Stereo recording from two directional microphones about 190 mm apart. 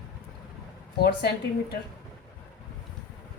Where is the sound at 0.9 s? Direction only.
55° left (ahead or behind).